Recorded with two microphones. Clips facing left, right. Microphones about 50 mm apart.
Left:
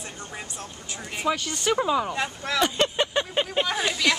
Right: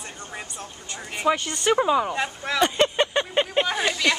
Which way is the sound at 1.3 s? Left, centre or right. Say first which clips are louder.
Right 3 dB; centre.